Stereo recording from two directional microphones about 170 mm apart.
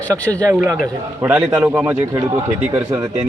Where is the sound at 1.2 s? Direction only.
10° right (ahead or behind).